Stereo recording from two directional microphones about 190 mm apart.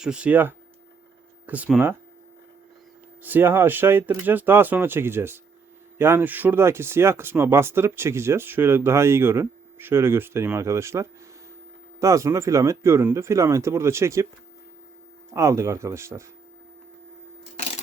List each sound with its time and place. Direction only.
0.0 s speech: 5° right (ahead or behind)
3.2 s speech: 10° right (ahead or behind)
15.3 s speech: 15° right (ahead or behind)